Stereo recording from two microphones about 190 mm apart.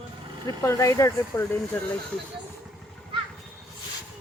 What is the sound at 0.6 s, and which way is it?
Speech, 15° left (ahead or behind).